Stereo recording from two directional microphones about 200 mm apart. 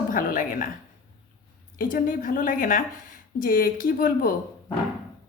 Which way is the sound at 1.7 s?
45° left (ahead or behind).